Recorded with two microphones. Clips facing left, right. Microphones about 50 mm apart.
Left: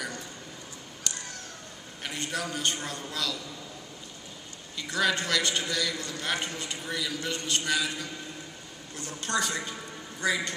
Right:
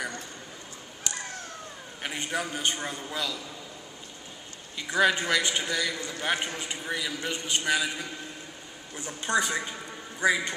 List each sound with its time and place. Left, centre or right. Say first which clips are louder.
2.0 s a man's voice: right 2 dB; centre
4.7 s a man's voice: right 4 dB; centre